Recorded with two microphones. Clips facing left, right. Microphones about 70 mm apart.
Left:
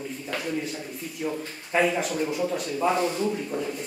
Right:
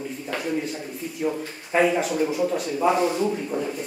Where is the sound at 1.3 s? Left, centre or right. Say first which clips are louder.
Right 3 dB; centre.